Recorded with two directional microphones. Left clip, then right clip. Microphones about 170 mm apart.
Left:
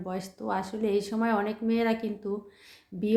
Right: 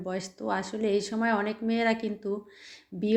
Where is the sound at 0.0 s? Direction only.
10° right (ahead or behind).